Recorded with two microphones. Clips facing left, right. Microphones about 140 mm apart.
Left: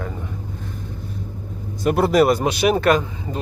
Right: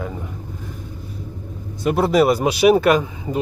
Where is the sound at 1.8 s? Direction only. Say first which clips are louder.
Even; centre (ahead or behind).